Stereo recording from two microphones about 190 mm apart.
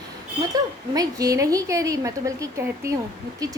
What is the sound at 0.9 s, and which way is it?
A woman's voice, 20° right (ahead or behind).